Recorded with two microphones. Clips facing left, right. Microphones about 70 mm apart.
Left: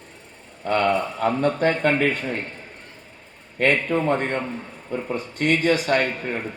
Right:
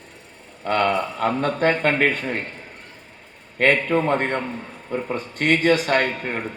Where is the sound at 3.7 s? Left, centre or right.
Right.